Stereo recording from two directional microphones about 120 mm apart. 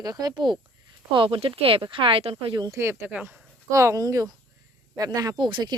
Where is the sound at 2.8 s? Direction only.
20° right (ahead or behind); by 5.7 s 40° right (ahead or behind).